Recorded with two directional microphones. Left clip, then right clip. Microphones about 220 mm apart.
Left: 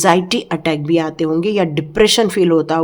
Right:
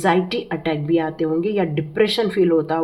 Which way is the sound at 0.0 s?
45° left (ahead or behind).